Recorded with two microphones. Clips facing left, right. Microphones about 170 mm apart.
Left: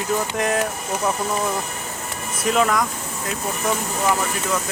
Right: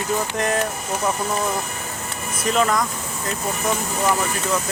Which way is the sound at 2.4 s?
5° left (ahead or behind).